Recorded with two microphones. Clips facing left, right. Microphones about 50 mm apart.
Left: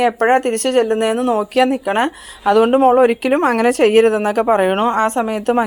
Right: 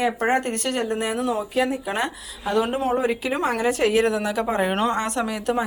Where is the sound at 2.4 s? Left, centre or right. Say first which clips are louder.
Left 11 dB; left.